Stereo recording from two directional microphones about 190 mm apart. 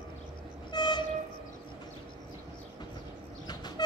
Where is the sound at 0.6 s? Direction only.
25° left (ahead or behind).